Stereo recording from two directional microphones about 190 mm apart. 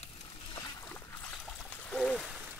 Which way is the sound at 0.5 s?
20° left (ahead or behind).